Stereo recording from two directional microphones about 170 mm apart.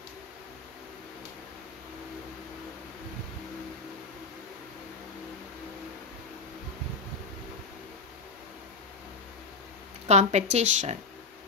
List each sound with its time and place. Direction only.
10.0 s speech: 40° right (ahead or behind)